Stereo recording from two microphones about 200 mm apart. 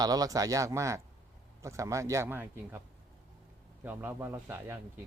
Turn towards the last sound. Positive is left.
turn(degrees=-10)  # may be behind; listen again after turning